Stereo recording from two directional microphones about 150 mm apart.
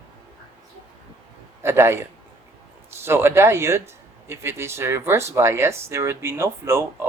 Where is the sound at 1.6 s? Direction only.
15° right (ahead or behind).